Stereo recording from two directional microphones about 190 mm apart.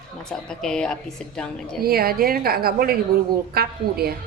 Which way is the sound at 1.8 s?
55° right (ahead or behind).